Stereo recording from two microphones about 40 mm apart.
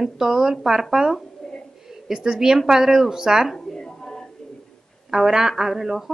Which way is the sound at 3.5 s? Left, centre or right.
Centre.